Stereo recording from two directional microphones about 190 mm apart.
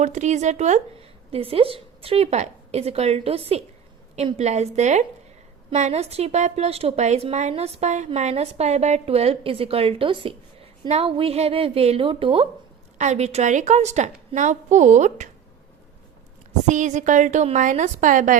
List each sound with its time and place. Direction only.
0.0 s a woman's voice: 40° right (ahead or behind)
16.6 s a woman's voice: 40° right (ahead or behind)